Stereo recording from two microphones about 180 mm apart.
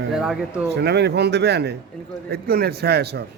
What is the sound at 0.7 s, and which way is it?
A man's voice, 70° right (ahead or behind).